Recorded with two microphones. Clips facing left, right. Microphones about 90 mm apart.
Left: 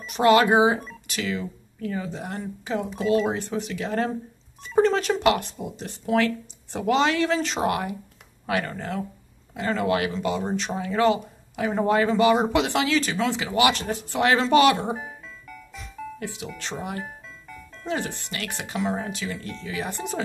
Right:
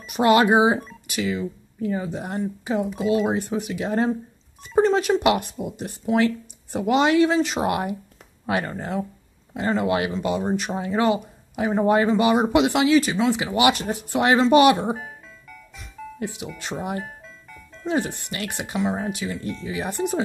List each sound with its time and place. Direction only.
0.2 s speech: 20° right (ahead or behind)
8.5 s speech: 25° right (ahead or behind)
16.2 s speech: 15° right (ahead or behind)
18.8 s speech: 5° right (ahead or behind)
19.0 s speech: 15° right (ahead or behind)